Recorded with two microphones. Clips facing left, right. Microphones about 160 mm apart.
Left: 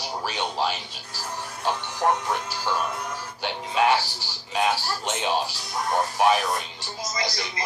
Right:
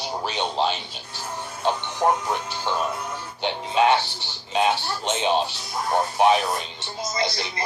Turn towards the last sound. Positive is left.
turn(degrees=-25)  # may be behind; listen again after turning